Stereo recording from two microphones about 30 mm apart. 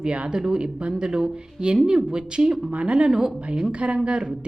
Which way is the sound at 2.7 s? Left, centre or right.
Right.